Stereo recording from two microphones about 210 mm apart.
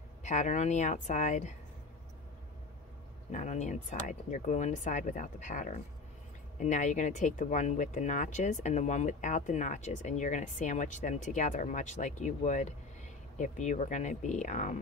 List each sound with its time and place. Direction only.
0.2 s speech: 35° left (ahead or behind)
3.3 s speech: 35° left (ahead or behind)